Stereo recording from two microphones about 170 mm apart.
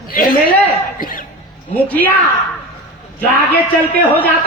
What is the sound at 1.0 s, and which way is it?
Cough, 55° left (ahead or behind).